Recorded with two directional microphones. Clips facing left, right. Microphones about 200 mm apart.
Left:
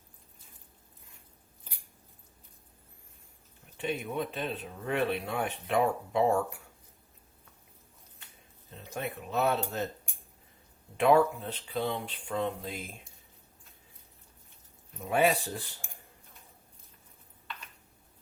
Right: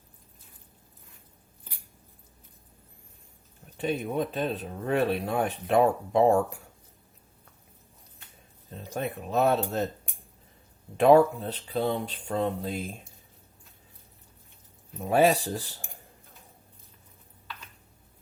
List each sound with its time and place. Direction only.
3.8 s speech: 40° right (ahead or behind)
8.7 s speech: 40° right (ahead or behind)
10.9 s speech: 35° right (ahead or behind)
15.0 s speech: 35° right (ahead or behind)